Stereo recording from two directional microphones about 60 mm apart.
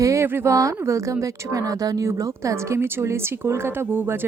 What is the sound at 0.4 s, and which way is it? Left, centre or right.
Speech, right.